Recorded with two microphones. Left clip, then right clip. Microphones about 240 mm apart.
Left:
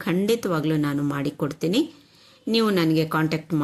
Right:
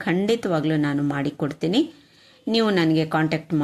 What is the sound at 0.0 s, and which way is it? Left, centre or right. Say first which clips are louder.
A woman's voice: right 1 dB; centre.